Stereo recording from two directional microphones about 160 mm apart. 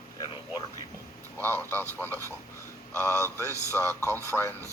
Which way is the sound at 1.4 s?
10° left (ahead or behind).